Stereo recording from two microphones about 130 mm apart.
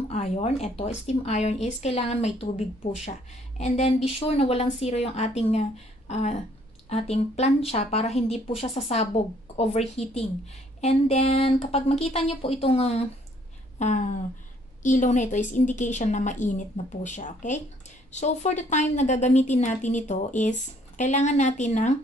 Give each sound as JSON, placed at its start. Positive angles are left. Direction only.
{"t": 0.1, "sound": "a woman's voice", "side_deg": 55}
{"t": 6.0, "sound": "a sound", "side_deg": 55}
{"t": 6.9, "sound": "speech", "side_deg": 55}
{"t": 13.7, "sound": "a woman's voice", "side_deg": 65}